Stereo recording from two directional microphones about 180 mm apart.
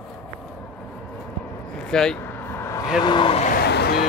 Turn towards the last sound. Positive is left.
turn(degrees=65)  # may be behind; listen again after turning